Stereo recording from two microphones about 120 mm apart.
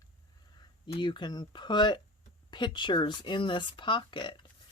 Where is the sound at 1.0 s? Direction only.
40° left (ahead or behind).